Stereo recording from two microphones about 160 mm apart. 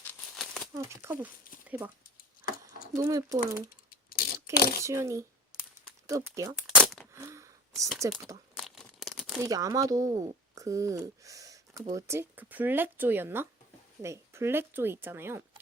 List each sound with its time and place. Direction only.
0.0 s crumpling: 10° left (ahead or behind)
0.7 s speech: 20° right (ahead or behind)
2.5 s a sound: 60° left (ahead or behind)
2.9 s speech: 20° right (ahead or behind)
4.5 s a child's voice: 70° left (ahead or behind)
4.8 s speech: 20° right (ahead or behind)
6.8 s a sound: centre (ahead or behind)
7.1 s a sound: 15° right (ahead or behind)
8.5 s crumpling: centre (ahead or behind)
9.4 s speech: 20° right (ahead or behind)